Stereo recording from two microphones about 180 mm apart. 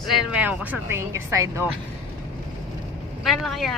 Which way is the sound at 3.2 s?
Centre (ahead or behind).